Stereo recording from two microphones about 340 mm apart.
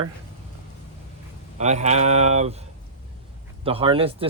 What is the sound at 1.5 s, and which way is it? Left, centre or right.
Speech, centre.